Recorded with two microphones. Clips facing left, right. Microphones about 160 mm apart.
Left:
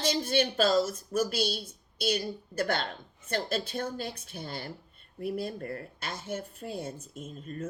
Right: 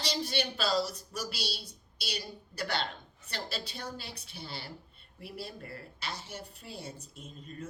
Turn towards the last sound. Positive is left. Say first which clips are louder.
# left 6 dB
turn(degrees=50)  # may be behind; listen again after turning